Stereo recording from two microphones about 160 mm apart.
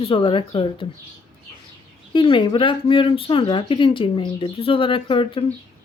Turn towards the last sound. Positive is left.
turn(degrees=35)  # may be behind; listen again after turning